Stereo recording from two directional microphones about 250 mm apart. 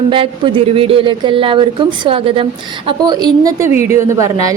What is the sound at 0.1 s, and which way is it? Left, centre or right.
A woman's voice, centre.